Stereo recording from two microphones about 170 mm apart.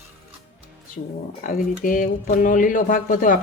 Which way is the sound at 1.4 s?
55° left (ahead or behind).